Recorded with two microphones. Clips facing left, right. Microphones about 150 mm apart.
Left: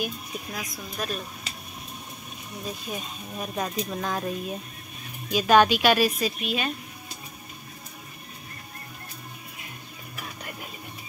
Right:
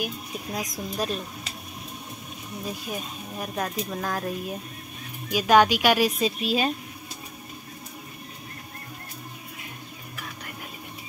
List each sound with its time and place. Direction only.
0.5 s speech: 35° right (ahead or behind)
2.9 s speech: 5° right (ahead or behind)
6.4 s speech: 30° right (ahead or behind)